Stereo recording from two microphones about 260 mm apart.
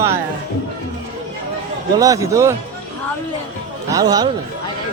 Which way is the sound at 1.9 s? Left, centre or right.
Centre.